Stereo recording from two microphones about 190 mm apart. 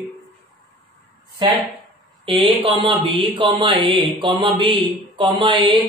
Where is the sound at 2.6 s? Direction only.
30° right (ahead or behind).